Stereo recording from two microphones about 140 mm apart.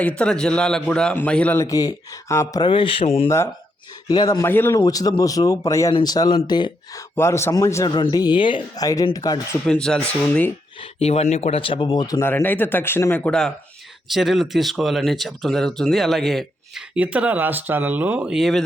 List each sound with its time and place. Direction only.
0.2 s a man's voice: 5° left (ahead or behind)
1.6 s speech: 25° left (ahead or behind)
3.2 s speech: 20° left (ahead or behind)
4.8 s speech: 25° left (ahead or behind)
7.2 s speech: 20° left (ahead or behind)
7.9 s speech: 35° left (ahead or behind)
9.1 s speech: 25° left (ahead or behind)
9.6 s a man's voice: 5° left (ahead or behind)
11.0 s speech: 50° left (ahead or behind)
11.6 s speech: 35° left (ahead or behind)
12.3 s a man's voice: 15° left (ahead or behind)